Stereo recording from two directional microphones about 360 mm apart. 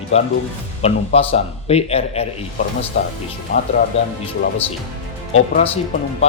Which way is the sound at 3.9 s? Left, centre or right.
Centre.